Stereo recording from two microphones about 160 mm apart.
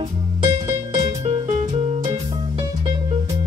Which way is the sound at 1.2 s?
35° right (ahead or behind).